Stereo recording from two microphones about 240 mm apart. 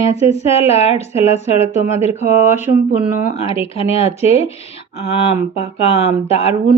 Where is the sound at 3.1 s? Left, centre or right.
Left.